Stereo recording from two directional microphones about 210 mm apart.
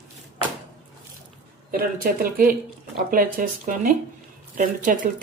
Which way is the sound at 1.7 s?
45° right (ahead or behind).